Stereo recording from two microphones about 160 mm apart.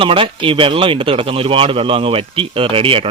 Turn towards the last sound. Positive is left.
turn(degrees=-35)  # may be behind; listen again after turning